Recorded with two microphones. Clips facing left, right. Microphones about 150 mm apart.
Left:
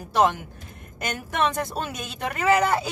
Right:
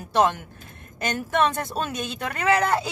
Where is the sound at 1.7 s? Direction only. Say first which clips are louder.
Right 3 dB; 10° left (ahead or behind).